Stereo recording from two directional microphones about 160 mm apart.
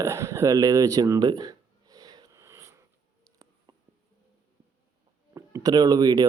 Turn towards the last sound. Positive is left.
turn(degrees=-25)  # may be behind; listen again after turning